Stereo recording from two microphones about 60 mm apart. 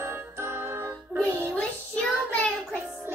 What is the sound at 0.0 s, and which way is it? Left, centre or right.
Music, right.